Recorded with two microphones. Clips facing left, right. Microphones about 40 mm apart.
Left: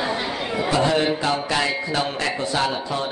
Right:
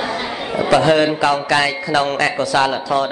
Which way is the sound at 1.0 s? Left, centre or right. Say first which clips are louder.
Right 6 dB; right.